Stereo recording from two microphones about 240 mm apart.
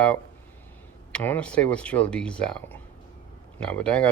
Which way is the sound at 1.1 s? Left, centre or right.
Centre.